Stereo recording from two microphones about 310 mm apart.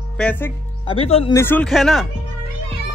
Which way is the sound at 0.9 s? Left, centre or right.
Centre.